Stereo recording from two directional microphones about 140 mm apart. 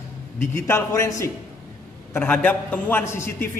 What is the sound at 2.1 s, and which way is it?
A man's voice, 10° left (ahead or behind).